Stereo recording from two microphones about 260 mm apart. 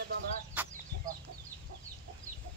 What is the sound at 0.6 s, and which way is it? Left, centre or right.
Chicken, centre.